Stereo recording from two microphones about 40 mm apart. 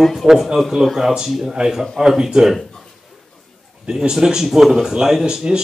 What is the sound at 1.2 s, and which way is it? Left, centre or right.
Speech, centre.